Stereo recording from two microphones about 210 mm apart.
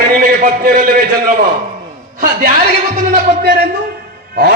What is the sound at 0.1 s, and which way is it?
Speech, 40° right (ahead or behind).